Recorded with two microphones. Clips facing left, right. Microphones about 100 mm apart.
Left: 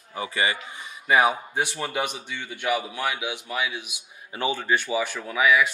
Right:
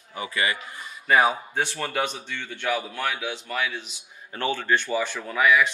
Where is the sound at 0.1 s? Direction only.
25° left (ahead or behind).